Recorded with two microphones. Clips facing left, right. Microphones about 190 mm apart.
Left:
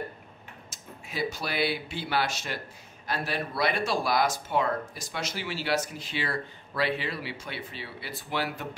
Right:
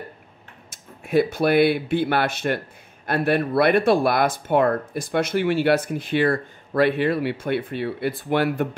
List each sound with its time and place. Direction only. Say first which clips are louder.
0.7 s speech: right 16 dB; 55° right (ahead or behind)